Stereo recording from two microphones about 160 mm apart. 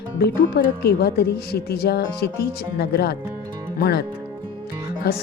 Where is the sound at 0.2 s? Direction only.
85° left.